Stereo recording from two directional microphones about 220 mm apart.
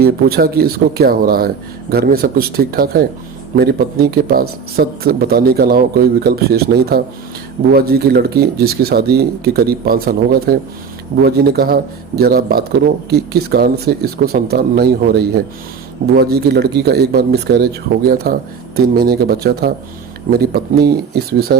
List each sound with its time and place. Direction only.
0.0 s speech: 45° right (ahead or behind)